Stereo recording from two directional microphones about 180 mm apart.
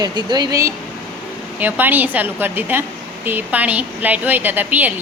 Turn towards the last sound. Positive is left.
turn(degrees=-10)  # may be behind; listen again after turning